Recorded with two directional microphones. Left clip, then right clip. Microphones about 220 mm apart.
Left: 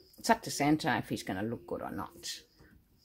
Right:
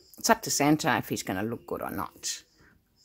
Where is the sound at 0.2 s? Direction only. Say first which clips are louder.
Right 5 dB; 25° right (ahead or behind).